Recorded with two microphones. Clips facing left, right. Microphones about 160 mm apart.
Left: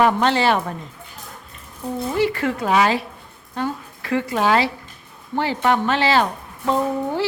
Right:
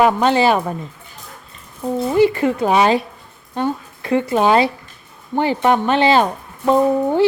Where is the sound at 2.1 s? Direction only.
20° right (ahead or behind).